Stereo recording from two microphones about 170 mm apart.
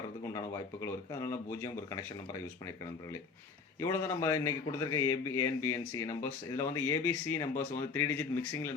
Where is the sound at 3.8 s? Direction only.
15° left (ahead or behind).